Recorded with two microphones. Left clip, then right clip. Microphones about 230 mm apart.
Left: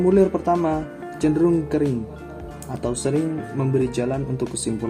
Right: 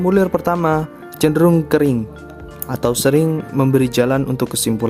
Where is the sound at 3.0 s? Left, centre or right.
Right.